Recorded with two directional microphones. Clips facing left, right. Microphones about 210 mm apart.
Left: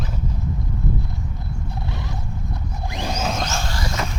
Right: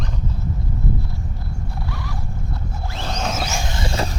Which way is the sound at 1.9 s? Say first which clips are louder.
Even; 20° left (ahead or behind).